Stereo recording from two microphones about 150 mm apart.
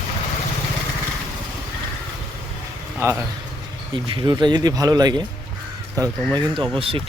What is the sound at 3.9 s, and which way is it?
Speech, 30° right (ahead or behind).